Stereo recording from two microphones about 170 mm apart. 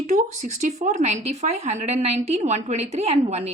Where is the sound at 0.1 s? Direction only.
40° right (ahead or behind).